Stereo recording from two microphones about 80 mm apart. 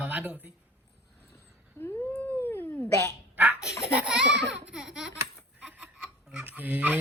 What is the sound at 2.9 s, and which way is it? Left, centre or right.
Dog, left.